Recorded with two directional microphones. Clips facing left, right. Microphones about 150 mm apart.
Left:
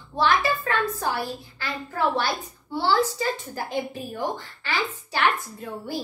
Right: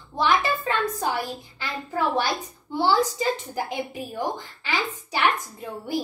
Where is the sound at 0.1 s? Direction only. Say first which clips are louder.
Even; 15° right (ahead or behind).